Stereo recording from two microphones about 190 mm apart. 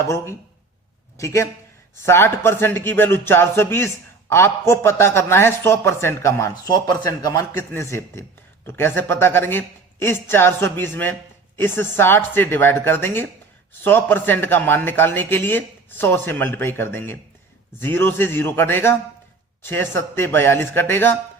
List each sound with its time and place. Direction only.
0.0 s a man's voice: 15° left (ahead or behind)